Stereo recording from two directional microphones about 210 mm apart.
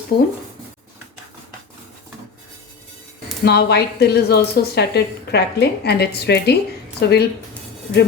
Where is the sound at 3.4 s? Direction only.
50° left (ahead or behind).